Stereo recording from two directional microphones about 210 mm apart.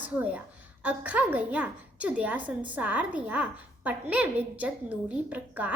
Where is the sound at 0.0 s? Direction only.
5° right (ahead or behind).